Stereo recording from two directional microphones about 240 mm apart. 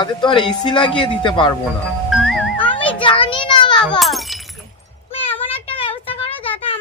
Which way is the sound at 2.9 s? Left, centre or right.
Left.